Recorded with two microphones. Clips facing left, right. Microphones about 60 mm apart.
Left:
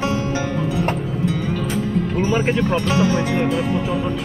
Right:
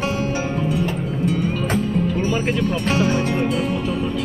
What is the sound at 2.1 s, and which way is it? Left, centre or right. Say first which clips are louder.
Speech: left 2 dB; left.